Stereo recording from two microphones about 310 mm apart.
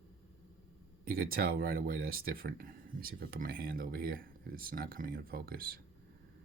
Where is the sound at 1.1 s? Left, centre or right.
Right.